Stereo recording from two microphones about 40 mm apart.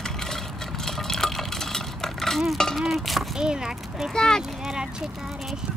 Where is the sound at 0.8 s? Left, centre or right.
Centre.